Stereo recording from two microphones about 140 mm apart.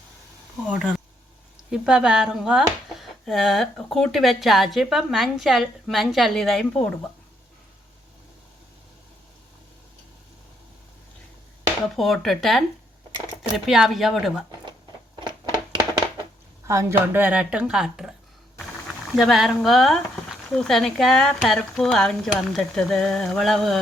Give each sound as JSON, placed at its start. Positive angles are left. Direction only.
{"t": 0.7, "sound": "speech", "side_deg": -5}
{"t": 11.9, "sound": "speech", "side_deg": 0}
{"t": 13.7, "sound": "speech", "side_deg": 0}
{"t": 15.2, "sound": "a sound", "side_deg": -35}
{"t": 16.6, "sound": "a woman's voice", "side_deg": -20}
{"t": 19.1, "sound": "speech", "side_deg": 0}